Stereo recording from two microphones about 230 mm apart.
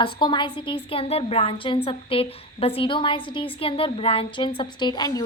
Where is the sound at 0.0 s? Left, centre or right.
Centre.